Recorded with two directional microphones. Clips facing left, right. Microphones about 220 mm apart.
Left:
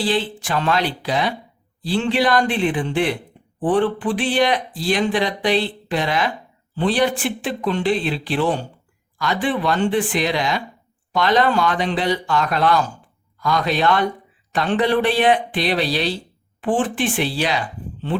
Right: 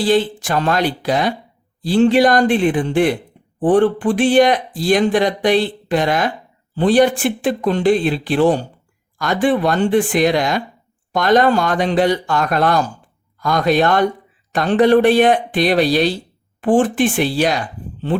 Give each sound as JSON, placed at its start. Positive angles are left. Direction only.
{"t": 0.0, "sound": "speech", "side_deg": -45}